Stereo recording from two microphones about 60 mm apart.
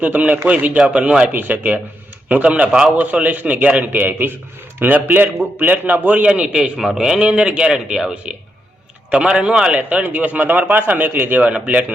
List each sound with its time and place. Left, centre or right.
0.0 s a man's voice: right
6.2 s a man's voice: centre
6.7 s a man's voice: centre; by 11.9 s right